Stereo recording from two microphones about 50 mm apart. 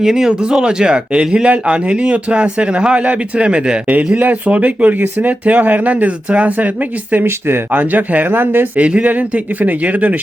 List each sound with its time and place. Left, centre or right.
0.0 s speech: centre; by 6.7 s right
7.3 s speech: right
7.7 s a man's voice: right
8.8 s a man's voice: right